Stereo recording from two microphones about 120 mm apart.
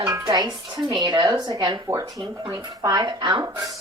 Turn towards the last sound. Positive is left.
turn(degrees=-35)  # may be behind; listen again after turning